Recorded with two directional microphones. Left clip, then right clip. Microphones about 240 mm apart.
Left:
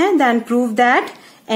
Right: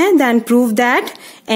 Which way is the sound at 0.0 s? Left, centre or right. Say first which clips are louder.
Right 2 dB; right.